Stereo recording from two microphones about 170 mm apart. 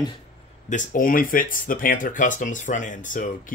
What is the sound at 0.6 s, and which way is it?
Speech, 50° left (ahead or behind).